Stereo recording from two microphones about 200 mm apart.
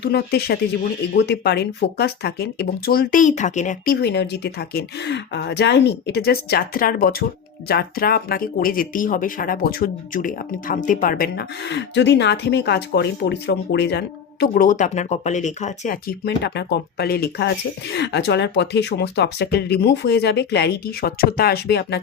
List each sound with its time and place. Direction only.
0.0 s speech: 55° left (ahead or behind)
4.0 s speech: 55° left (ahead or behind)